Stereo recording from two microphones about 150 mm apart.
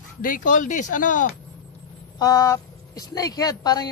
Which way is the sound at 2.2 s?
25° left (ahead or behind).